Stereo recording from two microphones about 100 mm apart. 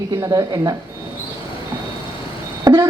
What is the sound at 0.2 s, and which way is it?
Speech, 40° right (ahead or behind).